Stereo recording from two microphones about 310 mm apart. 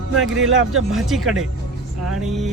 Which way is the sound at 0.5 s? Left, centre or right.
Right.